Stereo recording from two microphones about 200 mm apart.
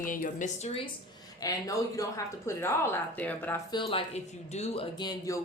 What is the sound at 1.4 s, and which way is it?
Speech, 15° left (ahead or behind).